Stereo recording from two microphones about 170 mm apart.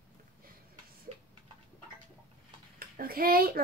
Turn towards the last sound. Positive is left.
turn(degrees=-60)  # may be behind; listen again after turning